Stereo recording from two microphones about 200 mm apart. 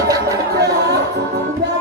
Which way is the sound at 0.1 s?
15° right (ahead or behind).